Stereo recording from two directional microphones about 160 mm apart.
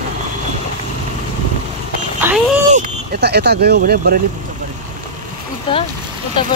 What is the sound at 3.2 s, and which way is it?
Speech, 90° right.